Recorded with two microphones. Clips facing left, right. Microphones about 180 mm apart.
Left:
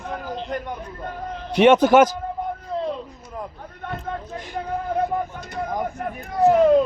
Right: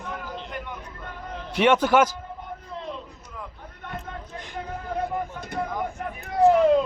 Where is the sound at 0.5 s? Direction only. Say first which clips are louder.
Left 7 dB; 40° left (ahead or behind).